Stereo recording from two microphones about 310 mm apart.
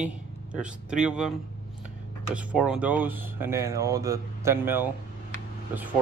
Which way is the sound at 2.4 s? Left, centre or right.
Centre.